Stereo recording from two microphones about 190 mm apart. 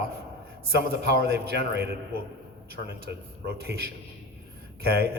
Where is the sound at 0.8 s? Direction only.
60° right (ahead or behind).